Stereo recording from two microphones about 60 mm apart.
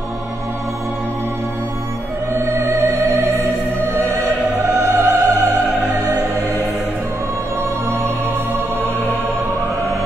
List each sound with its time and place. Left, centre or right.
2.3 s music: right
4.6 s opera: right